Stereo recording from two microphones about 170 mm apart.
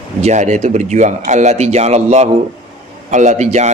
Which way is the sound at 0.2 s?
45° right (ahead or behind).